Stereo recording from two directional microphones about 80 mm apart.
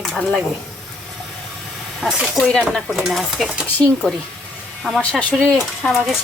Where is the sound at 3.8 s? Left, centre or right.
Centre.